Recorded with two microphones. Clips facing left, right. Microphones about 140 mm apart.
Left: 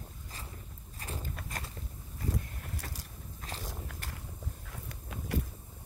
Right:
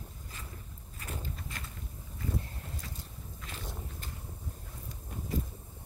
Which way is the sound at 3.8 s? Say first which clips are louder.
Even; 80° left.